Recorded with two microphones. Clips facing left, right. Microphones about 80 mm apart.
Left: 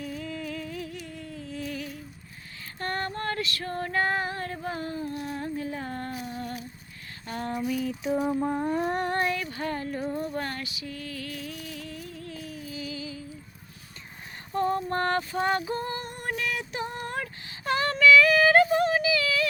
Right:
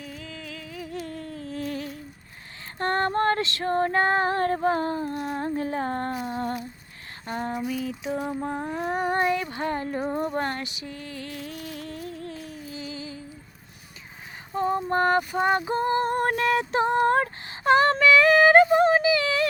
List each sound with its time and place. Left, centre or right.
0.0 s music: centre
0.9 s a sound: right
3.5 s female singing: right
5.5 s female singing: right
6.2 s humming: right
7.3 s a sound: right
8.0 s lullaby: centre
8.4 s a sound: centre
9.1 s female singing: right
10.3 s music: right
14.5 s female singing: centre; by 16.1 s right
16.1 s a sound: right